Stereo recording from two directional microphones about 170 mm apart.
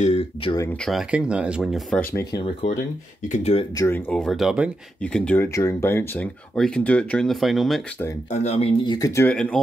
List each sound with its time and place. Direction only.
0.0 s speech: 35° left (ahead or behind)
0.7 s speech: centre (ahead or behind)
2.3 s speech: 30° left (ahead or behind)
2.7 s speech: 45° left (ahead or behind)
3.7 s speech: 15° left (ahead or behind)
8.3 s speech: 40° left (ahead or behind); by 9.3 s 20° left (ahead or behind)
9.3 s speech: 5° left (ahead or behind)